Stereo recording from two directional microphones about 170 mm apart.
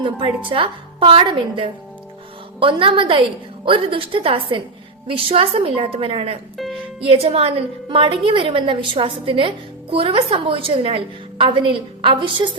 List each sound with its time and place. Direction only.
0.0 s a woman's voice: 30° right (ahead or behind)